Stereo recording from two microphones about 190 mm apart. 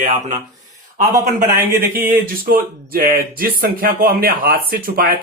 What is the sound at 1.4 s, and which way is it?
Speech, 50° right (ahead or behind).